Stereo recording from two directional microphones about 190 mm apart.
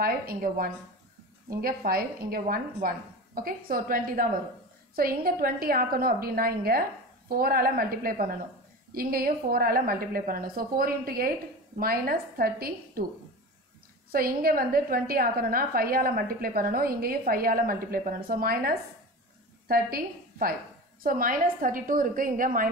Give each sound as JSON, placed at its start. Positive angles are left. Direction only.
{"t": 0.0, "sound": "a woman's voice", "side_deg": -50}
{"t": 14.1, "sound": "a woman's voice", "side_deg": -50}